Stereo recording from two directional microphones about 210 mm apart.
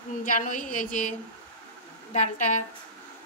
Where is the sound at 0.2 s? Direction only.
40° left (ahead or behind).